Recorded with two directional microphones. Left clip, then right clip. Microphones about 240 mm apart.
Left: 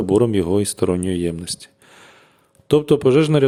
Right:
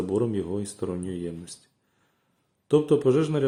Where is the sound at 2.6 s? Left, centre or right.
Left.